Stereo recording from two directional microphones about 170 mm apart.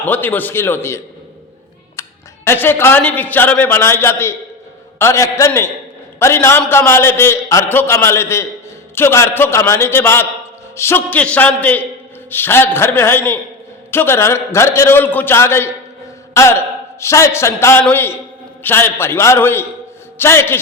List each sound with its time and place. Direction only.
0.0 s a man's voice: 10° left (ahead or behind)
2.0 s music: 15° left (ahead or behind)
2.5 s a man's voice: 15° left (ahead or behind)